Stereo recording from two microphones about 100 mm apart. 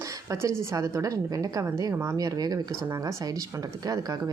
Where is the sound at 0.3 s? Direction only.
30° right (ahead or behind).